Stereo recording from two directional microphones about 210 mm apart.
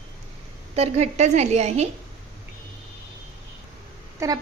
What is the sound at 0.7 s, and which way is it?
A woman's voice, 30° right (ahead or behind).